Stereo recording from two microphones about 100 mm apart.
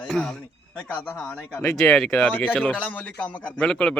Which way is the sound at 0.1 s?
5° left (ahead or behind).